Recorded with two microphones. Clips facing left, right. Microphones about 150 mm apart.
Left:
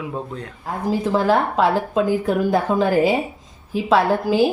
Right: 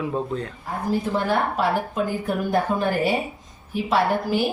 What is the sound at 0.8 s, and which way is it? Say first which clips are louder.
Speech: left 5 dB; 90° left.